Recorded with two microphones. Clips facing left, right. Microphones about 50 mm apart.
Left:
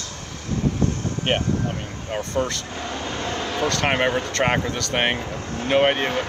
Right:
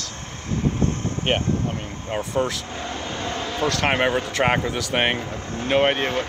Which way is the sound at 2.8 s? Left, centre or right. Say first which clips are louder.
Left 1 dB; left.